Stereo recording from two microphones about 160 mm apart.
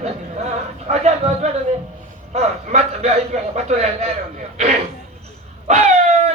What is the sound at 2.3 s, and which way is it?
A man's voice, 40° right (ahead or behind).